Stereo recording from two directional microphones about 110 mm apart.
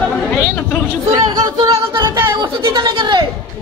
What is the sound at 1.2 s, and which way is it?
Speech, 40° right (ahead or behind).